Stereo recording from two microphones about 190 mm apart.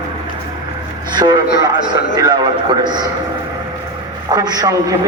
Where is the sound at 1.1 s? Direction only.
20° right (ahead or behind).